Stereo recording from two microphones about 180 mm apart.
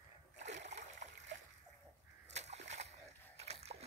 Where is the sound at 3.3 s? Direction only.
35° right (ahead or behind).